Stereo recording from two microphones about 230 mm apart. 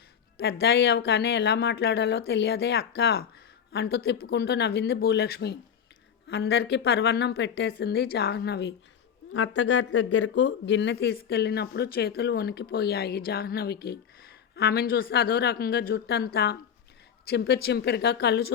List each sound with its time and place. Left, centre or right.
0.3 s speech: left
9.3 s speech: left